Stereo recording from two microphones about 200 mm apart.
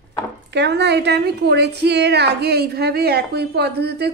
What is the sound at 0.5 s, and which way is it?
A woman's voice, 60° right (ahead or behind).